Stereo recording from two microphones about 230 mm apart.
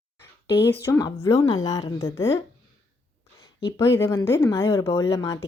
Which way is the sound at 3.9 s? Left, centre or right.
Centre.